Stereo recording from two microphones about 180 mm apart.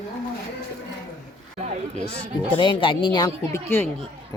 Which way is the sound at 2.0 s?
35° right (ahead or behind).